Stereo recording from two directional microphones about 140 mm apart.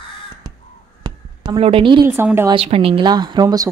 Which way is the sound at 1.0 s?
40° right (ahead or behind).